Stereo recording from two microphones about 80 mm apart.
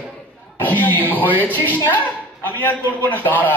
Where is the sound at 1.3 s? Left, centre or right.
Left.